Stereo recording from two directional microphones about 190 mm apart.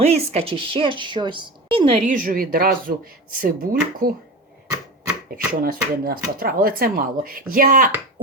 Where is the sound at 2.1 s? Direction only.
45° right (ahead or behind).